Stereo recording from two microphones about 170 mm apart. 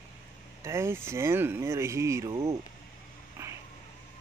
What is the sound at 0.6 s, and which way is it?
Speech, 15° right (ahead or behind).